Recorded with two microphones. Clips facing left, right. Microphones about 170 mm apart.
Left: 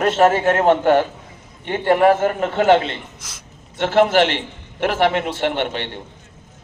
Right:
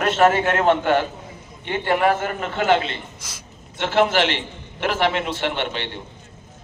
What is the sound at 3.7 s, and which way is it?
A man's voice, 45° left (ahead or behind).